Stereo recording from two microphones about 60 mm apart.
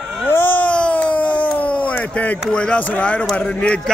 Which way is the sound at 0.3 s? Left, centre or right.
Left.